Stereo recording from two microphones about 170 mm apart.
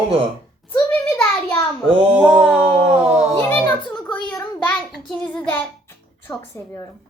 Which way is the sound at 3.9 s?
10° left (ahead or behind).